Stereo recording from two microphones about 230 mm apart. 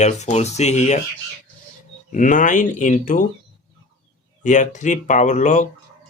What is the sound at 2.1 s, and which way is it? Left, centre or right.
Speech, left.